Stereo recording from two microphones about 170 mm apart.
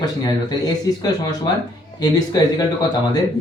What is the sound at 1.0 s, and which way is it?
Speech, 25° left (ahead or behind).